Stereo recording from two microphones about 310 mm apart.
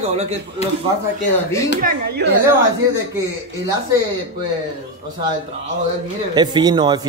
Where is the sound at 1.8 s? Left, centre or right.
Right.